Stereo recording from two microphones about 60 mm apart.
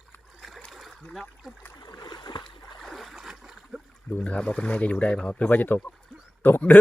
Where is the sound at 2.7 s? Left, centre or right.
Centre.